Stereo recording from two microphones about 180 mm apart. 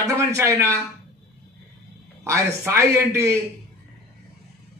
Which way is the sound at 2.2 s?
15° right (ahead or behind).